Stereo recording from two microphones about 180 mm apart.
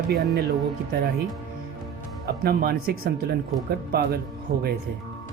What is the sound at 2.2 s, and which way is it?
Speech, 60° right (ahead or behind).